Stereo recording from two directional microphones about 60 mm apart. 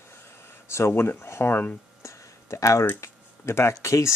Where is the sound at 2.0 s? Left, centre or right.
Left.